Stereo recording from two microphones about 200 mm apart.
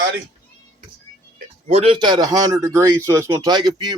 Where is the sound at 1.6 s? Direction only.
30° right (ahead or behind).